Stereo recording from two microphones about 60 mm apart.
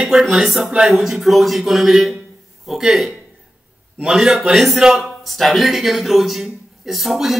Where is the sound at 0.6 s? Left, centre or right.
Centre.